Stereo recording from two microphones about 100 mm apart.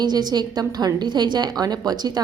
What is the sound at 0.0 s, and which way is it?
A woman's voice, 45° right (ahead or behind).